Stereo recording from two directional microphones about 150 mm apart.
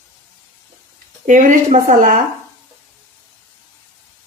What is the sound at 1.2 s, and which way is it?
Speech, 60° right (ahead or behind).